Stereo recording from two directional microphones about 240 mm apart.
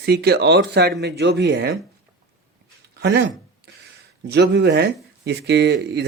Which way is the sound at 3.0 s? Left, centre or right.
Right.